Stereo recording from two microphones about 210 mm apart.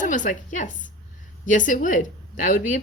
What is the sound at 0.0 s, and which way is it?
A woman's voice, 35° left (ahead or behind).